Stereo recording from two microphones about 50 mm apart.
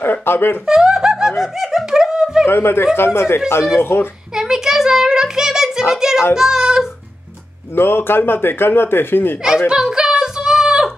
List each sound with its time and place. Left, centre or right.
0.0 s speech: left
0.7 s music: centre
1.4 s giggle: centre
2.4 s speech: left
4.4 s a sound: centre
6.3 s a child's voice: centre
7.7 s speech: left
9.7 s a sound: centre